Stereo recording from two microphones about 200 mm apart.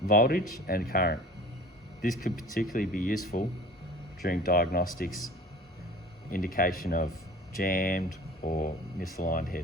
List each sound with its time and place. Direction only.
0.1 s speech: 45° left (ahead or behind)
4.2 s speech: 45° left (ahead or behind)
6.3 s speech: 45° left (ahead or behind)